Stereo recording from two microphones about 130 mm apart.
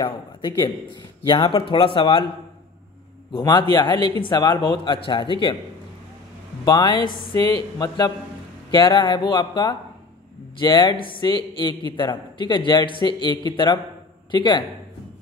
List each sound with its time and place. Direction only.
0.0 s a man's voice: 35° left (ahead or behind)
3.3 s a man's voice: 35° left (ahead or behind)
6.6 s a man's voice: 30° left (ahead or behind)